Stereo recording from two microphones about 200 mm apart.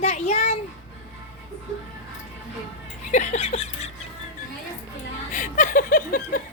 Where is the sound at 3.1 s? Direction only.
35° left (ahead or behind).